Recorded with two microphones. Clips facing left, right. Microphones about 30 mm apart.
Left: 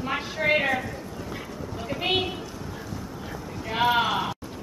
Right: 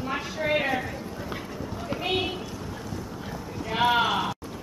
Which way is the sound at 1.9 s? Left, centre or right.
Right.